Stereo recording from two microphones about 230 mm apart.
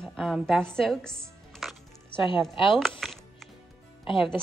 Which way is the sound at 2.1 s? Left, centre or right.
Left.